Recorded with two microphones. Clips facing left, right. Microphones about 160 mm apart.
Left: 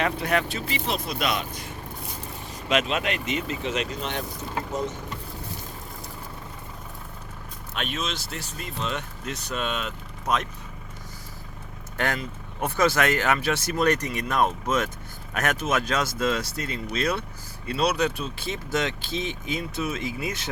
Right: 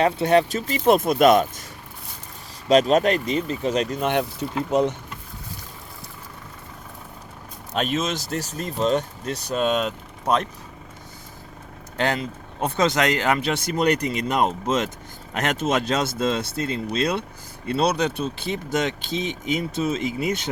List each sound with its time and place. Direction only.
0.0 s speech: 30° right (ahead or behind)
0.4 s speech: 45° right (ahead or behind)
4.0 s speech: 65° right (ahead or behind)
7.7 s speech: 40° right (ahead or behind)
11.9 s speech: 25° right (ahead or behind)